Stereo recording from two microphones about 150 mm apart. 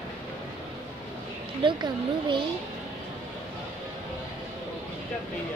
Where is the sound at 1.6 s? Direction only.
30° right (ahead or behind).